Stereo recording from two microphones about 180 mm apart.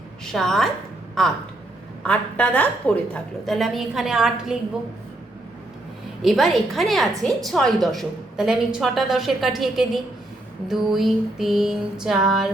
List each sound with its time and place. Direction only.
0.3 s a woman's voice: centre (ahead or behind)
6.2 s a woman's voice: centre (ahead or behind)